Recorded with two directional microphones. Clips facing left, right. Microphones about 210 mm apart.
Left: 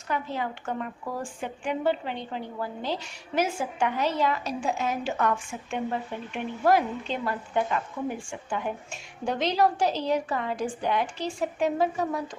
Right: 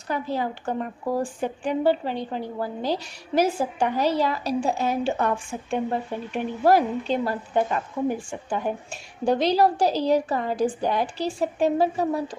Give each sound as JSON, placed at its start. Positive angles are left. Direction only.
{"t": 0.1, "sound": "a woman's voice", "side_deg": -35}